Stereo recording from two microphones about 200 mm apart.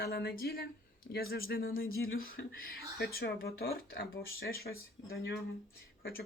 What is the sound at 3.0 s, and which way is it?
Speech, 50° left (ahead or behind).